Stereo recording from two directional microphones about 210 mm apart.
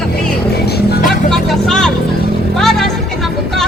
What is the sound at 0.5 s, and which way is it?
Music, 50° left (ahead or behind).